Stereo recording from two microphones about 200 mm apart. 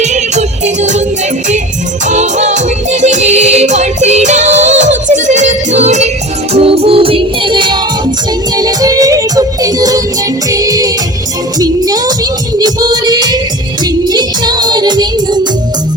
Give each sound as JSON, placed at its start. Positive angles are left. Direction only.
{"t": 0.0, "sound": "music", "side_deg": -35}
{"t": 2.0, "sound": "music", "side_deg": -35}